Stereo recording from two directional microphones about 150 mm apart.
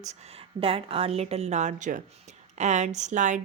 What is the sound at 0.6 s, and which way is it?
A woman's voice, 40° right (ahead or behind).